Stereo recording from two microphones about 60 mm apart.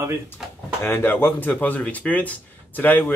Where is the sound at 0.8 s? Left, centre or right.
Left.